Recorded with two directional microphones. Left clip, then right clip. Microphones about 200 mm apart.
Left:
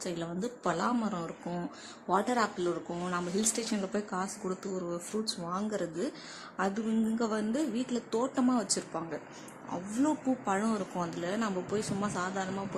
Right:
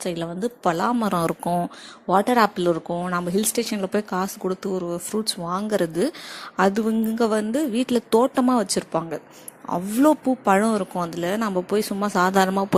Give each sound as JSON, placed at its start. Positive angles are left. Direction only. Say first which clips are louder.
{"t": 0.0, "sound": "speech", "louder": "right 10 dB", "side_deg": -30}